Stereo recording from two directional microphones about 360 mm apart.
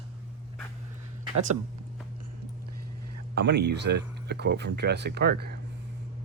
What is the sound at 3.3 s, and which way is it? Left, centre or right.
Speech, right.